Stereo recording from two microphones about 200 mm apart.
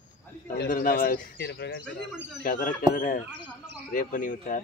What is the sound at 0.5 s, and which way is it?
A man's voice, 45° left (ahead or behind).